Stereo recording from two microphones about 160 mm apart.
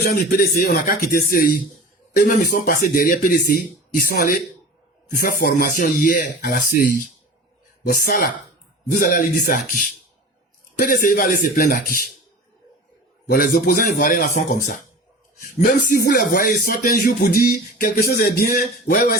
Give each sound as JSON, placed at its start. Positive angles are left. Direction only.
{"t": 0.1, "sound": "speech", "side_deg": 60}
{"t": 8.0, "sound": "speech", "side_deg": 65}
{"t": 13.3, "sound": "speech", "side_deg": 60}
{"t": 16.0, "sound": "speech", "side_deg": 65}